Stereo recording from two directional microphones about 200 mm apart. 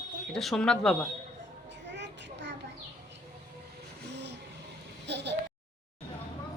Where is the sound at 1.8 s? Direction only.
60° right (ahead or behind).